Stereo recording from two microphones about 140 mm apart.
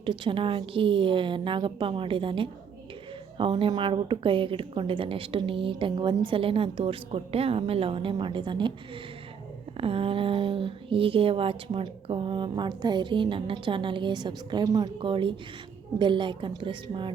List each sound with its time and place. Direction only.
0.0 s a woman's voice: 35° right (ahead or behind)
9.7 s a woman's voice: 40° right (ahead or behind); by 14.8 s 25° right (ahead or behind)
14.9 s a woman's voice: 35° right (ahead or behind)